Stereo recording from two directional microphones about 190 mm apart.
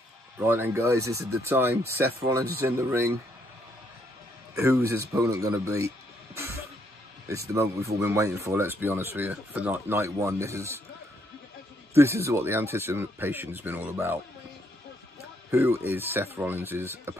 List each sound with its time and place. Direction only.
0.4 s speech: 15° right (ahead or behind)
4.6 s speech: 15° right (ahead or behind)
7.2 s speech: 15° right (ahead or behind)
11.9 s speech: 15° right (ahead or behind)
15.5 s speech: 15° right (ahead or behind)